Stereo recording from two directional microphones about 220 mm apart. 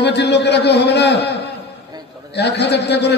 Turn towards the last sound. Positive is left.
turn(degrees=50)  # may be behind; listen again after turning